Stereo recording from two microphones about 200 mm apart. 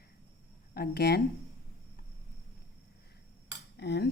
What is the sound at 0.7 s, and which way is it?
Speech, 55° left (ahead or behind).